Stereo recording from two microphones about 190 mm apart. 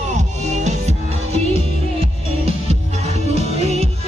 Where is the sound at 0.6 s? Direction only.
35° right (ahead or behind).